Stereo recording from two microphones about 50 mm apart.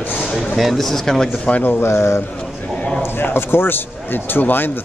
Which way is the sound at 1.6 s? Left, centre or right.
Left.